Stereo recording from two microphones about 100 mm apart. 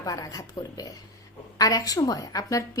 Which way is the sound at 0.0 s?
35° left (ahead or behind).